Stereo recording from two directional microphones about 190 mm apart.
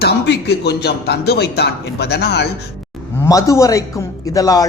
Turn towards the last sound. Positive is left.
turn(degrees=20)  # may be behind; listen again after turning